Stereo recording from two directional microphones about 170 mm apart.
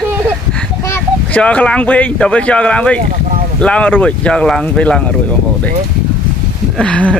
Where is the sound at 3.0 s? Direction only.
55° right (ahead or behind).